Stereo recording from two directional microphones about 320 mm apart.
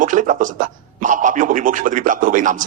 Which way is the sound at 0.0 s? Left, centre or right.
Right.